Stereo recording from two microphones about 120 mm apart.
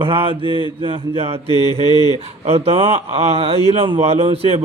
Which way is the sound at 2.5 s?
50° right (ahead or behind).